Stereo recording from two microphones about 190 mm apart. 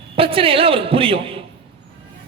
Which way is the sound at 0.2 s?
30° right (ahead or behind).